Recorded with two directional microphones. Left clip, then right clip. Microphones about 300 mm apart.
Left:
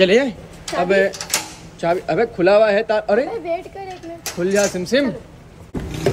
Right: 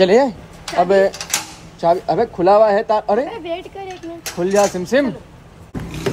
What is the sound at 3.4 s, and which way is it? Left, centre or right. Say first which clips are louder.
Speech: left 1 dB; right.